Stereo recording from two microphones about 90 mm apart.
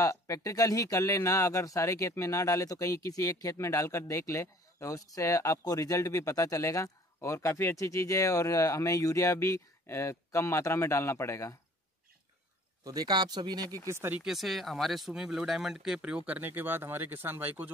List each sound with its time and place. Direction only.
0.0 s speech: 40° left (ahead or behind)
12.8 s speech: 50° right (ahead or behind)
13.8 s speech: 25° right (ahead or behind)
14.2 s speech: centre (ahead or behind); by 17.6 s 20° right (ahead or behind)